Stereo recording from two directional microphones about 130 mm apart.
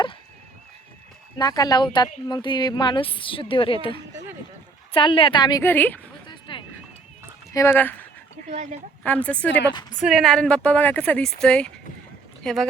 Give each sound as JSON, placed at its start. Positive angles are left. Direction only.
{"t": 1.4, "sound": "speech", "side_deg": 30}
{"t": 5.6, "sound": "speech", "side_deg": 15}
{"t": 6.2, "sound": "a sound", "side_deg": 40}
{"t": 7.5, "sound": "speech", "side_deg": 20}
{"t": 8.4, "sound": "a woman's voice", "side_deg": -60}
{"t": 9.0, "sound": "speech", "side_deg": 10}
{"t": 10.0, "sound": "speech", "side_deg": -5}